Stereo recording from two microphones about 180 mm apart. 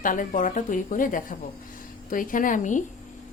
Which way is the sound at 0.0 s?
50° left (ahead or behind).